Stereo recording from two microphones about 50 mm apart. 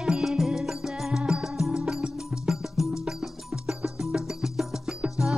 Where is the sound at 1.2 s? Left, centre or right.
Right.